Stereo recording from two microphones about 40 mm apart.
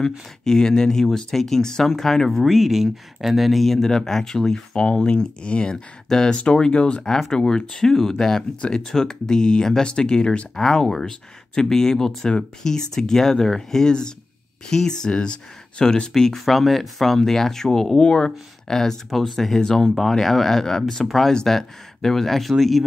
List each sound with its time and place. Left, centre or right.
0.0 s speech: centre
4.7 s speech: left
7.0 s speech: centre
10.5 s speech: centre
19.0 s speech: centre